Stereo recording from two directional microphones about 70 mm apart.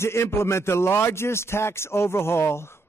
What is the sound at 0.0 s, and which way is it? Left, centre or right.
A man's voice, left.